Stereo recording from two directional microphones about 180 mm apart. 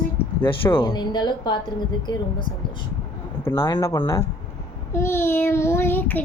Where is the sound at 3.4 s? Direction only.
15° left (ahead or behind).